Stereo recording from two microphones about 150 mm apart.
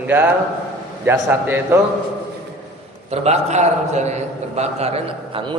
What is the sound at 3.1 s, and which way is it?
A man's voice, 45° right (ahead or behind).